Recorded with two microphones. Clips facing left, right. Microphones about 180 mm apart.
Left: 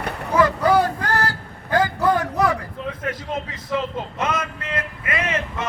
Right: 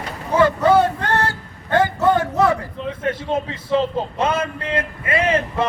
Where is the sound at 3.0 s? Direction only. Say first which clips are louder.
Right 7 dB; 30° right (ahead or behind).